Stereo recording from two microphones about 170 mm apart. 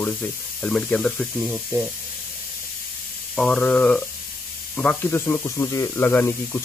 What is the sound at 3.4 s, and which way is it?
Speech, 5° left (ahead or behind).